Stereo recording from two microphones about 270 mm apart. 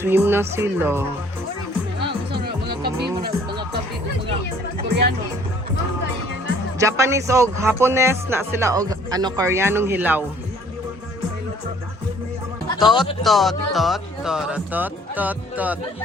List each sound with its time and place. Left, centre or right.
0.0 s speech: centre
2.6 s music: right
6.7 s speech: centre
12.6 s music: centre
13.2 s speech: centre